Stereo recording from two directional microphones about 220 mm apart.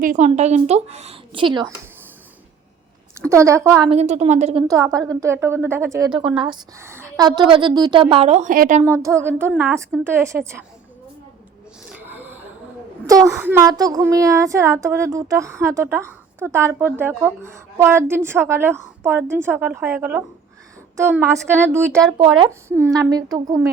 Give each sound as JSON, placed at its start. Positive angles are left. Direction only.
{"t": 0.0, "sound": "a woman's voice", "side_deg": -35}
{"t": 3.2, "sound": "a woman's voice", "side_deg": -15}
{"t": 3.8, "sound": "a woman's voice", "side_deg": -30}
{"t": 4.7, "sound": "speech", "side_deg": -15}
{"t": 8.8, "sound": "speech", "side_deg": -15}
{"t": 11.9, "sound": "a sound", "side_deg": -10}
{"t": 13.1, "sound": "speech", "side_deg": -15}
{"t": 21.8, "sound": "speech", "side_deg": 5}
{"t": 22.4, "sound": "speech", "side_deg": -15}